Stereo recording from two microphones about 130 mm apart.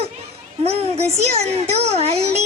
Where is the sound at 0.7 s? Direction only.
55° right (ahead or behind).